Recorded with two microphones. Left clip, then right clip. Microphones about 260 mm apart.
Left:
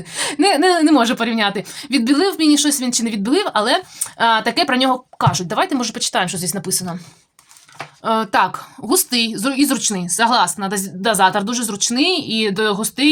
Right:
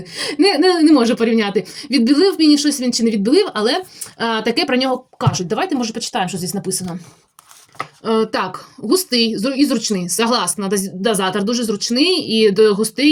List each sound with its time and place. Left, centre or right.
0.1 s speech: centre
8.0 s speech: left